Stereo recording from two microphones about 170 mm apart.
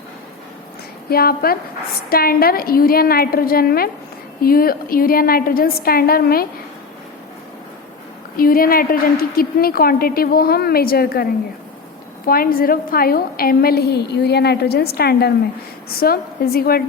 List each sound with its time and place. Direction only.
1.1 s a woman's voice: 60° left (ahead or behind)
8.4 s a woman's voice: 60° left (ahead or behind)